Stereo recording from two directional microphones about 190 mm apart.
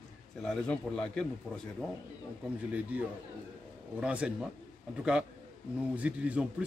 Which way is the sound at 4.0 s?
5° right (ahead or behind).